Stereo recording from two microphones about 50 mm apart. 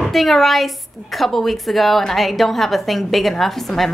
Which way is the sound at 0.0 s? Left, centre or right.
Centre.